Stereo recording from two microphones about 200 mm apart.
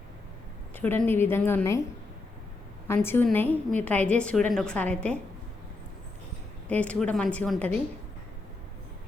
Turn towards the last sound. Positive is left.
turn(degrees=5)  # may be behind; listen again after turning